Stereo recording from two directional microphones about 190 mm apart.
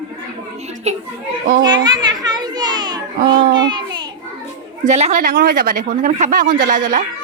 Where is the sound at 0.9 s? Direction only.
35° right (ahead or behind).